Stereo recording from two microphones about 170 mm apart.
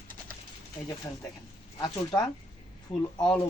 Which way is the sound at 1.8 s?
25° left (ahead or behind).